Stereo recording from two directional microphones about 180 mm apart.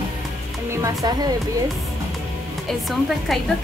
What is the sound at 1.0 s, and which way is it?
Speech, 20° right (ahead or behind).